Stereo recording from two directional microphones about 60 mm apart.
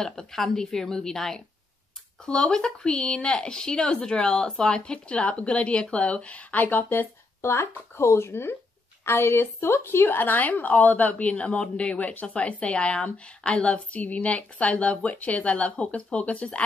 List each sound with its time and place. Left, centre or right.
0.0 s a woman's voice: centre